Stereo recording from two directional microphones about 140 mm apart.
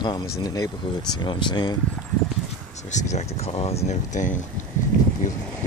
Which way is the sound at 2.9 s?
55° left (ahead or behind).